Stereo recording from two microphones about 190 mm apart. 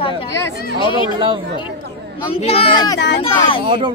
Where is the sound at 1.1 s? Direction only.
25° right (ahead or behind).